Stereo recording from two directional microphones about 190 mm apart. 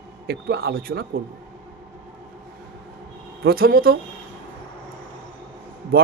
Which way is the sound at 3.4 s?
50° right (ahead or behind).